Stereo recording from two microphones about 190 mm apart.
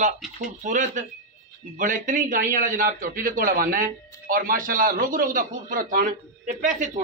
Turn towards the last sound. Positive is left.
turn(degrees=-40)  # may be behind; listen again after turning